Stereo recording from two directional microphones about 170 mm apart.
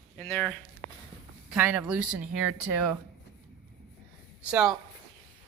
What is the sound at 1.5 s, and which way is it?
Speech, 10° right (ahead or behind).